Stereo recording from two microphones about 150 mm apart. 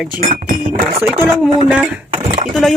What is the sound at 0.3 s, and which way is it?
Speech, 65° right (ahead or behind).